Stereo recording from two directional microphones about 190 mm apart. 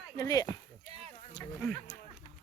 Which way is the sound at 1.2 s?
25° left (ahead or behind).